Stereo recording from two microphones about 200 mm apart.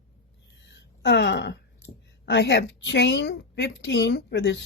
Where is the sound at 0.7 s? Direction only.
60° left (ahead or behind).